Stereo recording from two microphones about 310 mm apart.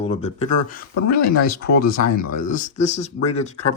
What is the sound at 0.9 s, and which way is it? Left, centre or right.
Speech, left.